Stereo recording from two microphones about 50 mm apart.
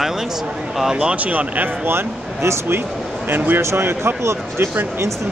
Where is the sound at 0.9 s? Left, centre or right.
Right.